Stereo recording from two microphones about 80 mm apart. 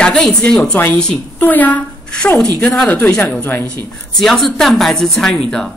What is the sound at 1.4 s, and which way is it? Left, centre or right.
Speech, left.